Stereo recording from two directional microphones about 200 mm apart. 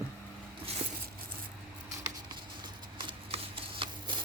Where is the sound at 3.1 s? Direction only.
25° right (ahead or behind).